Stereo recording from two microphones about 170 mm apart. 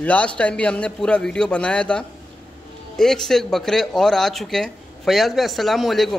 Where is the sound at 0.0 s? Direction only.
5° left (ahead or behind).